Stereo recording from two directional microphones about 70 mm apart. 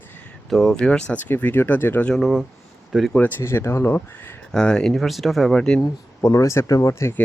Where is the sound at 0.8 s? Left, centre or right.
Centre.